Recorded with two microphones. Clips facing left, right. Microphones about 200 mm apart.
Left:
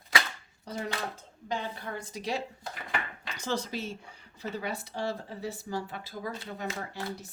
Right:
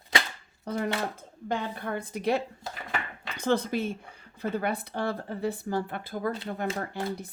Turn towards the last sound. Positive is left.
turn(degrees=-55)  # may be behind; listen again after turning